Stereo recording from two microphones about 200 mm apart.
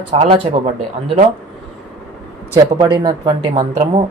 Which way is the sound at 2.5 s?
20° right (ahead or behind).